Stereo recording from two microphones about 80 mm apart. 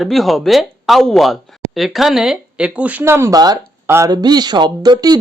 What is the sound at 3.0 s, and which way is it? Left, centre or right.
Speech, right.